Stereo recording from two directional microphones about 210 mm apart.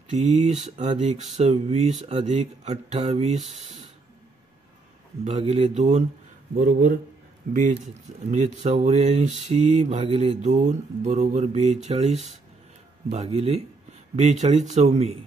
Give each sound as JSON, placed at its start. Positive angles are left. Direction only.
{"t": 0.2, "sound": "speech", "side_deg": -35}
{"t": 5.2, "sound": "speech", "side_deg": -30}
{"t": 7.5, "sound": "speech", "side_deg": -50}
{"t": 7.8, "sound": "speech", "side_deg": -35}